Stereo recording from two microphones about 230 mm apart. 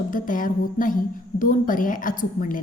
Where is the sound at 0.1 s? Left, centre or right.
Left.